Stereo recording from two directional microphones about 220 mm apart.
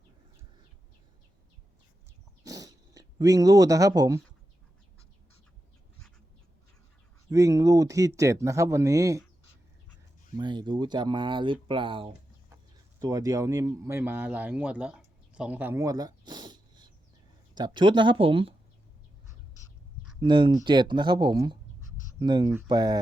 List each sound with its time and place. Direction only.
2.4 s cat: 15° right (ahead or behind)
7.3 s speech: 15° right (ahead or behind)
10.3 s speech: 20° right (ahead or behind)
20.2 s speech: 20° right (ahead or behind)